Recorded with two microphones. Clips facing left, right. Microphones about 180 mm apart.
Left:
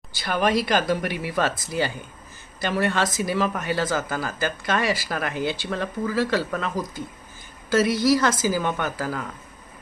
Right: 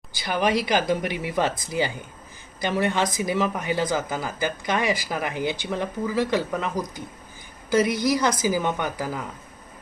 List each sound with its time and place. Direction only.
0.1 s speech: 15° right (ahead or behind)